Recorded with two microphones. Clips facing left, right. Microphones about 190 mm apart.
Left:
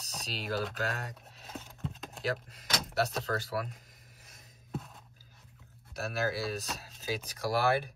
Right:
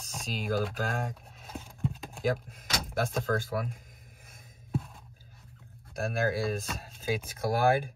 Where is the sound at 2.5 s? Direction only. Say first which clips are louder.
Right 1 dB; 50° right (ahead or behind).